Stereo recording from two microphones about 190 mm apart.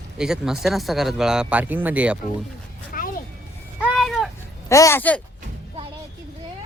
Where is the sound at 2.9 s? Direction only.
45° left (ahead or behind).